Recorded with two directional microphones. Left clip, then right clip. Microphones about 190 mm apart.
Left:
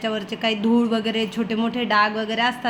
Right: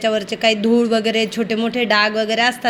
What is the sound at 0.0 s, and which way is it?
A woman's voice, 15° right (ahead or behind).